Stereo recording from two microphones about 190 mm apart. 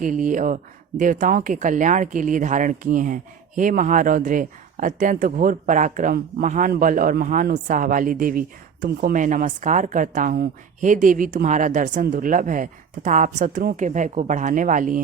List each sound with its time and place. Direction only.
0.0 s speech: 45° right (ahead or behind)